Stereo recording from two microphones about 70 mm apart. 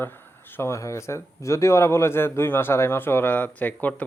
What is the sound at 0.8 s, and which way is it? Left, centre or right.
A man's voice, left.